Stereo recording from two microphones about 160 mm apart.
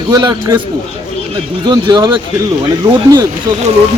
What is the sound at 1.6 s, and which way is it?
Speech, 25° right (ahead or behind).